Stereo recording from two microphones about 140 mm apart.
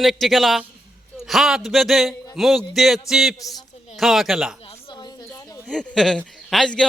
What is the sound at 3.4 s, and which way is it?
Speech, 25° left (ahead or behind).